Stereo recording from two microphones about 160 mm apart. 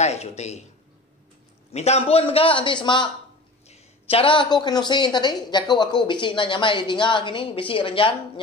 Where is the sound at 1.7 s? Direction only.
40° left (ahead or behind).